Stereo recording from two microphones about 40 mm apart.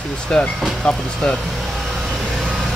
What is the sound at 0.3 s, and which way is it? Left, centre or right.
Speech, left.